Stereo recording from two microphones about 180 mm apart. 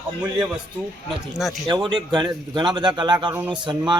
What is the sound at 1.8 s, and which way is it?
Speech, 25° right (ahead or behind).